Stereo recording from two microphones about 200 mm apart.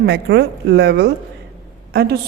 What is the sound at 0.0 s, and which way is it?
A woman's voice, 55° right (ahead or behind).